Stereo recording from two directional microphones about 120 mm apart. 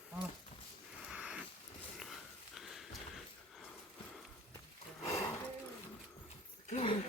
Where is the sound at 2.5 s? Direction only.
Centre (ahead or behind).